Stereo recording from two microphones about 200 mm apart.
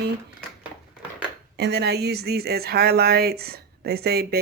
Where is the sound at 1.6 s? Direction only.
55° right (ahead or behind).